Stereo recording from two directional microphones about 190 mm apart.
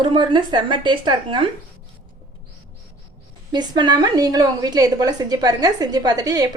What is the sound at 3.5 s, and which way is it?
A woman's voice, 20° right (ahead or behind).